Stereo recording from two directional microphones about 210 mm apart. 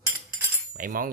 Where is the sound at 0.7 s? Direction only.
40° right (ahead or behind).